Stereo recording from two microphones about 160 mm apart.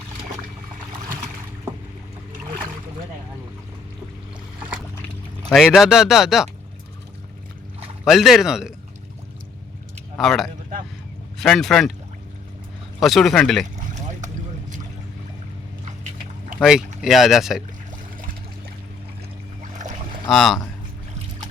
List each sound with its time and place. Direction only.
5.5 s speech: centre (ahead or behind)
8.0 s speech: centre (ahead or behind)
10.2 s speech: centre (ahead or behind)
13.0 s speech: centre (ahead or behind)
13.7 s boat: 50° right (ahead or behind)
16.6 s speech: centre (ahead or behind)
20.3 s speech: centre (ahead or behind)